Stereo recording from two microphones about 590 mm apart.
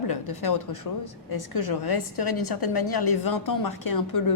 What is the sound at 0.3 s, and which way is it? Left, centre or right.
A woman's voice, left.